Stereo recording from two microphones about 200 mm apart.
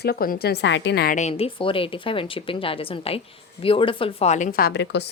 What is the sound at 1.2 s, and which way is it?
A woman's voice, 30° left (ahead or behind).